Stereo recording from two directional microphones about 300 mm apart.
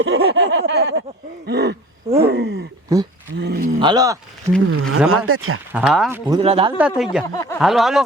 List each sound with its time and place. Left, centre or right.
0.3 s a sound: right
2.9 s speech: centre
3.3 s a sound: right
3.8 s speech: centre
4.7 s speech: right
5.7 s speech: centre
6.4 s speech: centre
6.7 s speech: centre
7.3 s speech: centre
7.6 s speech: centre